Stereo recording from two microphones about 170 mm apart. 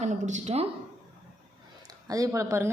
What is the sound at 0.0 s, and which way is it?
Speech, 45° right (ahead or behind).